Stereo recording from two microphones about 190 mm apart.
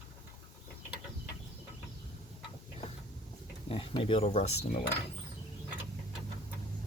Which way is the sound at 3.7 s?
25° left (ahead or behind).